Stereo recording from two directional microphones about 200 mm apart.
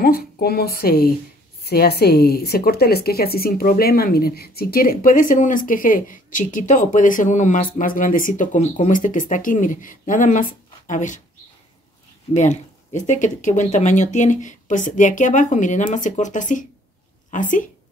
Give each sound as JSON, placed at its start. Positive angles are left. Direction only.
{"t": 0.0, "sound": "speech", "side_deg": 50}
{"t": 12.4, "sound": "a woman's voice", "side_deg": 35}